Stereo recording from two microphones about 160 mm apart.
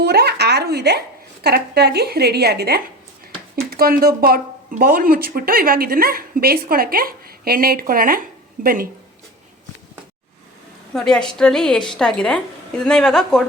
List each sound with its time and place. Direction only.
0.0 s a sound: 90° right
1.5 s a woman's voice: 90° right; by 8.9 s 65° right (ahead or behind)
10.9 s a woman's voice: 5° left (ahead or behind)